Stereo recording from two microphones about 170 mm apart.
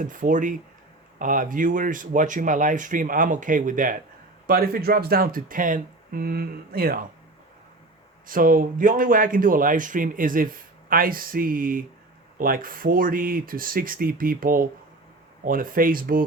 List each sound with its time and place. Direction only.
0.0 s speech: 50° right (ahead or behind)
8.3 s speech: 55° right (ahead or behind)